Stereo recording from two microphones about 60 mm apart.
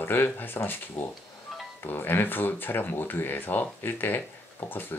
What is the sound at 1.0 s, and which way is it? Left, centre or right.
Speech, left.